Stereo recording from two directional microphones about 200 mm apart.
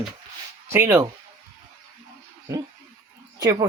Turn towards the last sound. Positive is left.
turn(degrees=-20)  # may be behind; listen again after turning